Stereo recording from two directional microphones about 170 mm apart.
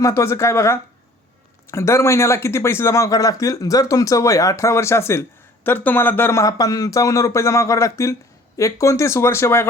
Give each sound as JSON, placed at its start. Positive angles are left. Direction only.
{"t": 0.0, "sound": "speech", "side_deg": 15}